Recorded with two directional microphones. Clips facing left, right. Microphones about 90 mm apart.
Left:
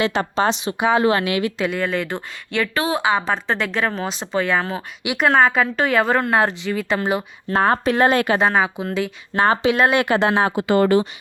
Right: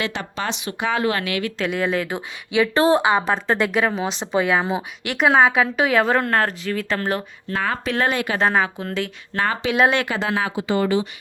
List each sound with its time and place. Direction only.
0.1 s speech: 35° left (ahead or behind)
0.7 s speech: 15° left (ahead or behind)
0.9 s speech: 25° left (ahead or behind)
1.5 s a woman's voice: centre (ahead or behind)
1.8 s speech: 10° right (ahead or behind)
2.7 s a woman's voice: 35° right (ahead or behind)
3.0 s a woman's voice: 10° right (ahead or behind)
5.0 s a woman's voice: centre (ahead or behind)
7.5 s speech: 35° left (ahead or behind)
8.4 s a woman's voice: 5° left (ahead or behind)
9.3 s speech: 20° left (ahead or behind)
10.5 s speech: 55° left (ahead or behind)